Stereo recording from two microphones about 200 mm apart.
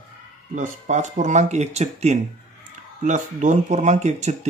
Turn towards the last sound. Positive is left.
turn(degrees=-35)  # may be behind; listen again after turning